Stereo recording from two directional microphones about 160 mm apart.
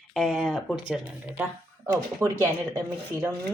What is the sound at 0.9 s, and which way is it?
Speech, 10° right (ahead or behind).